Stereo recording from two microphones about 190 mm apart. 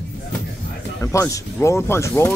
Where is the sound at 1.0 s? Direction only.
15° left (ahead or behind).